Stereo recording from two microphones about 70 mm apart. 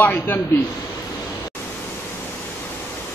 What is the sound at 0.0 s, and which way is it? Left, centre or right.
Speech, left.